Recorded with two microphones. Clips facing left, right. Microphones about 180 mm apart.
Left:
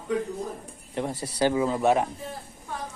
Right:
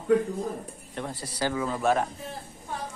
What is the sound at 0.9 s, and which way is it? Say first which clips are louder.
Speech: left 5 dB; 20° left (ahead or behind).